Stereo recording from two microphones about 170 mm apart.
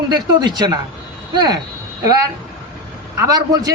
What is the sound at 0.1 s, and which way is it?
Speech, 25° right (ahead or behind).